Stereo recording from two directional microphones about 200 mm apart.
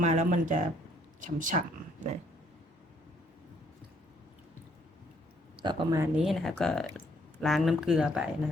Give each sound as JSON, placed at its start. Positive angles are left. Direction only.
{"t": 0.0, "sound": "speech", "side_deg": -35}
{"t": 5.5, "sound": "speech", "side_deg": -20}
{"t": 6.1, "sound": "speech", "side_deg": 0}